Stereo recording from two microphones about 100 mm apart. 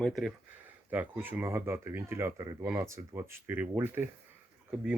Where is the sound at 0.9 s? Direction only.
20° right (ahead or behind).